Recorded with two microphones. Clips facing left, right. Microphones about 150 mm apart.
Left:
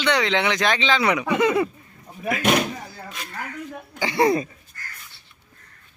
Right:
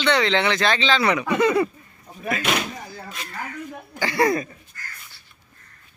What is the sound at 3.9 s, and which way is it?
Speech, 20° left (ahead or behind).